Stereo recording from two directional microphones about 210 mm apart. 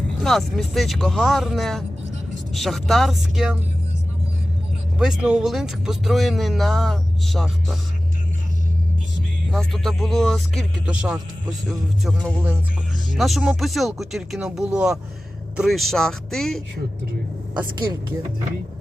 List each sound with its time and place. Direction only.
0.2 s speech: centre (ahead or behind)
4.9 s speech: 5° right (ahead or behind)
9.5 s speech: centre (ahead or behind)